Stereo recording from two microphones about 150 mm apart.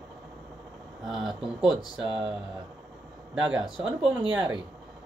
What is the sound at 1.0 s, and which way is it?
Speech, centre (ahead or behind).